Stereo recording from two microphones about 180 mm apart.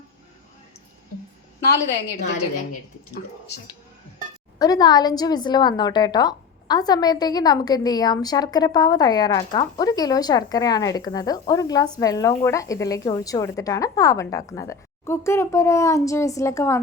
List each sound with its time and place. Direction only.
4.6 s a woman's voice: 20° left (ahead or behind)